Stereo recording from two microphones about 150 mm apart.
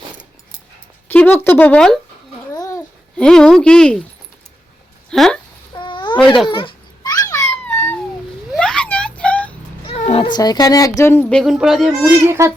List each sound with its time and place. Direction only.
1.0 s speech: 10° left (ahead or behind)
2.5 s babbling: 20° left (ahead or behind)
3.2 s speech: 5° left (ahead or behind)
5.1 s speech: centre (ahead or behind)
5.7 s babbling: 30° left (ahead or behind); by 7.9 s 15° left (ahead or behind)
8.5 s a sound: 5° left (ahead or behind)
9.8 s speech: 40° left (ahead or behind); by 12.1 s centre (ahead or behind)
12.3 s speech: 15° right (ahead or behind)